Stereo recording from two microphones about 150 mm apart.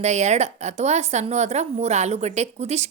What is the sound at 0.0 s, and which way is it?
A woman's voice, 50° right (ahead or behind).